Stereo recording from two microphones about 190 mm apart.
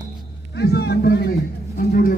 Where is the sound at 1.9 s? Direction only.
50° left (ahead or behind).